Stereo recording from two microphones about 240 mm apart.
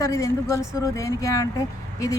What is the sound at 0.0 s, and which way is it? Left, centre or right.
A woman's voice, centre.